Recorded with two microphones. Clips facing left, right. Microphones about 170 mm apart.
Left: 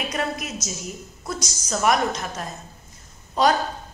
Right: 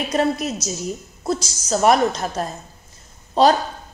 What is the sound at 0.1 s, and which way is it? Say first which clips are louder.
A woman's voice: right 7 dB; 30° right (ahead or behind).